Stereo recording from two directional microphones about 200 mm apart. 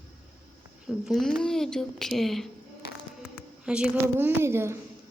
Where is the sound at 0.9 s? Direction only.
Centre (ahead or behind).